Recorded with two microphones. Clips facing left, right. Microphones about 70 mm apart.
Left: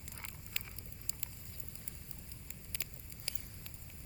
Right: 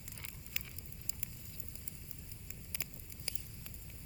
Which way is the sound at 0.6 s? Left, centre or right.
Centre.